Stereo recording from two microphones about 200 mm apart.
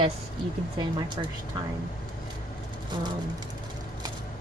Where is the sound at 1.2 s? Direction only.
20° right (ahead or behind).